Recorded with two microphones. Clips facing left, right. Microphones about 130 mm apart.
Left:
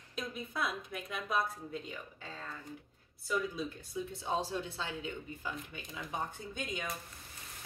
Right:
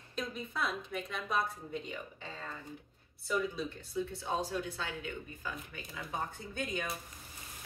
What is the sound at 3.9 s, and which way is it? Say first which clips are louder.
A woman's voice: right 1 dB; 20° left (ahead or behind).